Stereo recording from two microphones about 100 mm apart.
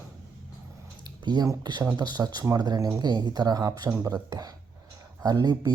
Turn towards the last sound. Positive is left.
turn(degrees=-40)  # may be behind; listen again after turning